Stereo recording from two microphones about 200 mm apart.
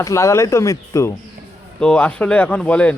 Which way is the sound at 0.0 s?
15° left (ahead or behind).